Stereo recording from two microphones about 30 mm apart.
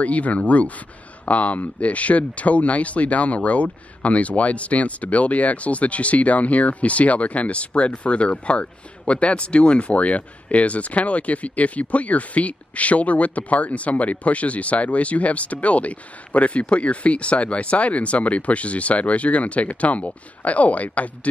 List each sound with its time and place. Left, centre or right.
0.0 s speech: left